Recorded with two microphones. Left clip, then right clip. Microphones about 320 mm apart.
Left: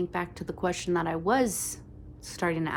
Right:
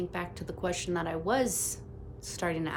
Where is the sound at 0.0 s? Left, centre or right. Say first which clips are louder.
Left 4 dB; centre.